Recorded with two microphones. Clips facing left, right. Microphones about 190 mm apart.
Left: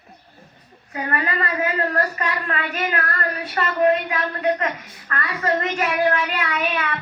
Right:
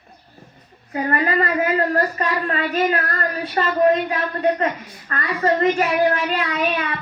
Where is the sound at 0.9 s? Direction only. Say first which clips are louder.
Right 4 dB; 30° right (ahead or behind).